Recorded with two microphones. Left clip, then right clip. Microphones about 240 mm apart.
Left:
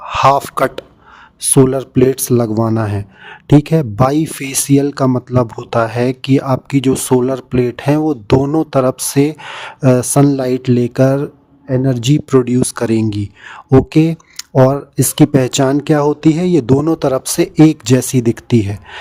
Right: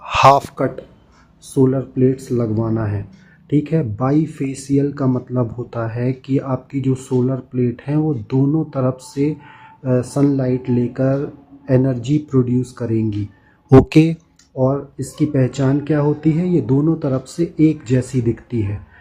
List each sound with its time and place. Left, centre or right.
0.0 s a sound: centre
0.5 s speech: left
13.7 s speech: centre
14.3 s speech: left